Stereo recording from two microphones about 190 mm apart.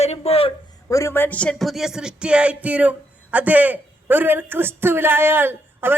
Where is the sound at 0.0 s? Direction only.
35° left (ahead or behind).